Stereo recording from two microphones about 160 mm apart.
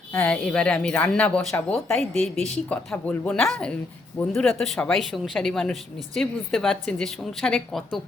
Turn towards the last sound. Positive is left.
turn(degrees=0)  # may be behind; listen again after turning